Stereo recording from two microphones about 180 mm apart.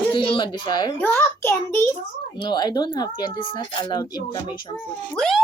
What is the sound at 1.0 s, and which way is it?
Speech, 10° left (ahead or behind).